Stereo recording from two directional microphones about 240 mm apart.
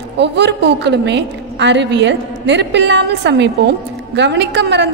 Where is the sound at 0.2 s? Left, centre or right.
Right.